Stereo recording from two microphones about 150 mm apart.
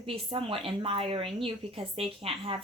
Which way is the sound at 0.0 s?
35° right (ahead or behind).